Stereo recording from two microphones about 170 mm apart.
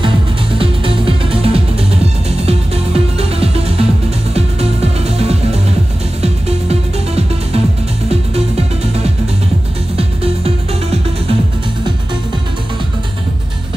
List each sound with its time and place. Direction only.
0.6 s music: 30° right (ahead or behind)
9.9 s music: 35° right (ahead or behind)